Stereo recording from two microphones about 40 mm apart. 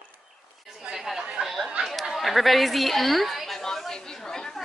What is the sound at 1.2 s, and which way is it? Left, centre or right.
Chatter, centre.